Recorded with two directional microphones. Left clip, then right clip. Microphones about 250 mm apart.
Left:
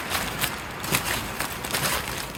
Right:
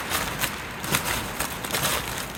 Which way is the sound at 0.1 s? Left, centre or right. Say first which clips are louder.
Even; centre.